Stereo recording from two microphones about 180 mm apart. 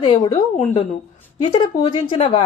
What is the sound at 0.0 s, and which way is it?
A woman's voice, 25° left (ahead or behind).